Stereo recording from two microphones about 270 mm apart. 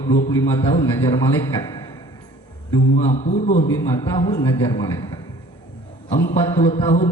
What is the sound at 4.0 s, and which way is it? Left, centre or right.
A man's voice, left.